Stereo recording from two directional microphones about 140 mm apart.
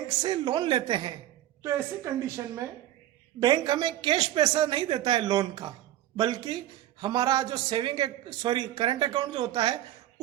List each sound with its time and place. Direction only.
0.2 s a man's voice: 35° right (ahead or behind)
1.6 s a woman's voice: 20° right (ahead or behind)